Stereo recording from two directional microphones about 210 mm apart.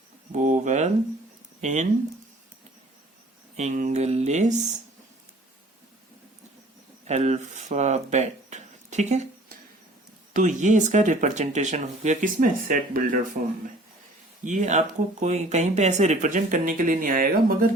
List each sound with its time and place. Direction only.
0.3 s a sound: 35° right (ahead or behind)
1.6 s speech: 35° right (ahead or behind)
3.6 s speech: 35° right (ahead or behind)
7.1 s speech: 35° right (ahead or behind)
10.3 s speech: 35° right (ahead or behind)
14.4 s speech: 35° right (ahead or behind)